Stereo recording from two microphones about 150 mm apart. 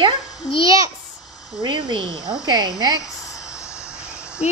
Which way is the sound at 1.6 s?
30° right (ahead or behind).